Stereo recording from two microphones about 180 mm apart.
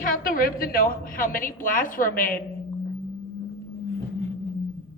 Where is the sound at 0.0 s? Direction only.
50° left (ahead or behind).